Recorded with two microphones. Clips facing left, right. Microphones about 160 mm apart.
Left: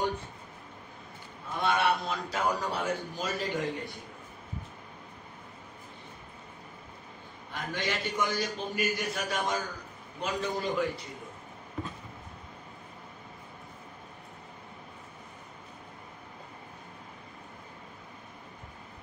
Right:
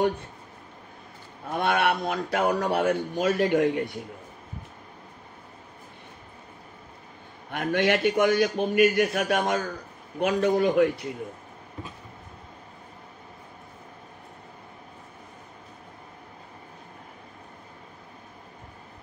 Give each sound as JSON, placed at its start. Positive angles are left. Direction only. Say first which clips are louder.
{"t": 1.5, "sound": "a man's voice", "louder": "right 3 dB", "side_deg": -60}
{"t": 7.5, "sound": "a man's voice", "louder": "right 10 dB", "side_deg": -65}